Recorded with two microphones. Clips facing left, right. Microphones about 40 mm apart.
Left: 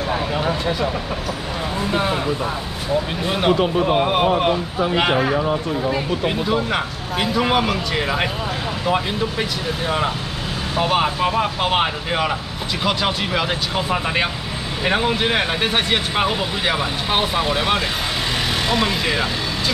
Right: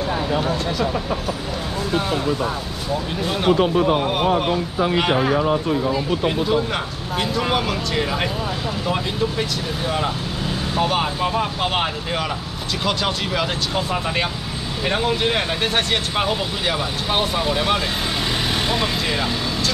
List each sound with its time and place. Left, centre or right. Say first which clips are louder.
0.4 s speech: left 1 dB; centre
1.9 s speech: left 1 dB; left
3.3 s speech: right 1 dB; centre
6.2 s speech: right 1 dB; centre